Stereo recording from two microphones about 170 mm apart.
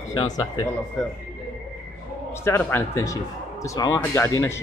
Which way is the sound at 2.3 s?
15° left (ahead or behind).